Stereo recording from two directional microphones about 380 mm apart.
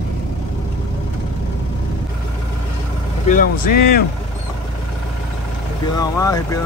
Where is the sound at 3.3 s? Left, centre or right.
Left.